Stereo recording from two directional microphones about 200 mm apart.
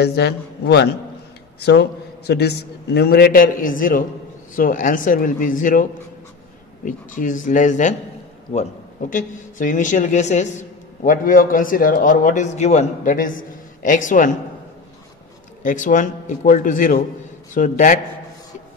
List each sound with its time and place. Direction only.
0.0 s a man's voice: 55° left (ahead or behind); by 14.3 s 40° left (ahead or behind)
15.6 s a man's voice: 40° left (ahead or behind)